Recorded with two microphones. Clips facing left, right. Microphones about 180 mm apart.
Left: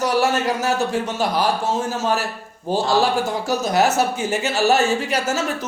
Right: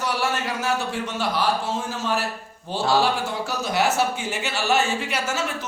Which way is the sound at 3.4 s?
40° left (ahead or behind).